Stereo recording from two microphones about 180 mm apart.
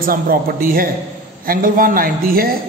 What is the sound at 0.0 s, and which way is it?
A man's voice, 55° right (ahead or behind).